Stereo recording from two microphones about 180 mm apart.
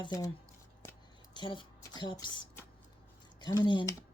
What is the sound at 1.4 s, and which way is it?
Speech, 25° left (ahead or behind).